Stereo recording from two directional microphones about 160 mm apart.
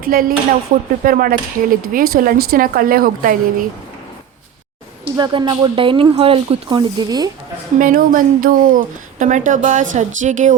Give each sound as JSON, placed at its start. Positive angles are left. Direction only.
{"t": 0.0, "sound": "speech", "side_deg": -65}
{"t": 5.1, "sound": "speech", "side_deg": -25}
{"t": 7.8, "sound": "speech", "side_deg": -60}